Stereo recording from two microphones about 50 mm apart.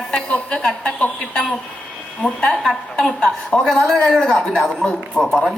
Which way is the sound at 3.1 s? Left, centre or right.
Centre.